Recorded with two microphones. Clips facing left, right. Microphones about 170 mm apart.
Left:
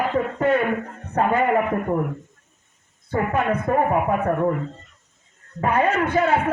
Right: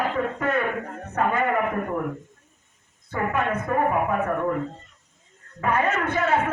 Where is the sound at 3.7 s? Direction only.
30° left (ahead or behind).